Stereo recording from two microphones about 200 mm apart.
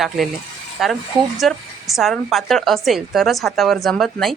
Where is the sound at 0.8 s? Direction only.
Centre (ahead or behind).